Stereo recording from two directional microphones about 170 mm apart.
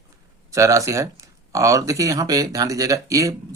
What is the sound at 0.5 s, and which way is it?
Speech, 20° right (ahead or behind).